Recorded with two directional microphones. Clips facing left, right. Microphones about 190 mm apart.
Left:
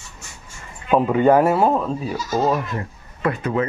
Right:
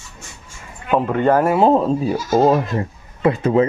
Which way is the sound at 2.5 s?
25° right (ahead or behind).